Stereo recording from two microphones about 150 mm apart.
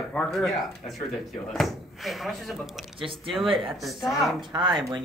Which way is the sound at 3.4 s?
35° right (ahead or behind).